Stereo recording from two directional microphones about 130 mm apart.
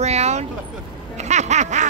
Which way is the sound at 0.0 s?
55° right (ahead or behind).